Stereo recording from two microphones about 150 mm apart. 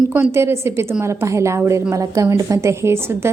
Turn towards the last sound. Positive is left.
turn(degrees=-15)  # may be behind; listen again after turning